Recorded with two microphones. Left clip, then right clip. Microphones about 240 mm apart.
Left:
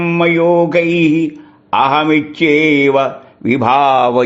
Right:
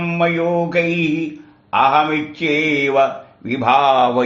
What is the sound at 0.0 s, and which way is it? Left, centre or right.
A man's voice, left.